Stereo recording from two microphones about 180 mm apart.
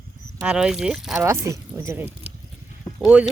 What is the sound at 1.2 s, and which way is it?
Speech, 15° right (ahead or behind).